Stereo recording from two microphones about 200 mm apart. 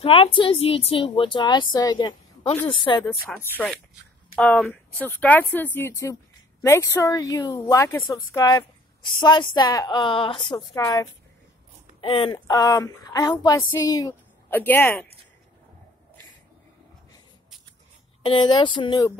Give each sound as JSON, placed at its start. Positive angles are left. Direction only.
{"t": 0.0, "sound": "a woman's voice", "side_deg": 25}
{"t": 3.3, "sound": "a woman's voice", "side_deg": 5}
{"t": 18.2, "sound": "a woman's voice", "side_deg": 25}